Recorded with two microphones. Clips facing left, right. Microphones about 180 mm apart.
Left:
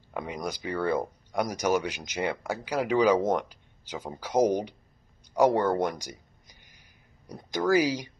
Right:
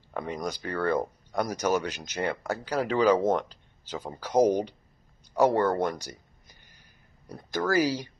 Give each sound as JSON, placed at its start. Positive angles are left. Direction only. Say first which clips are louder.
{"t": 0.1, "sound": "speech", "louder": "right 1 dB", "side_deg": 10}
{"t": 7.2, "sound": "speech", "louder": "left 2 dB", "side_deg": 15}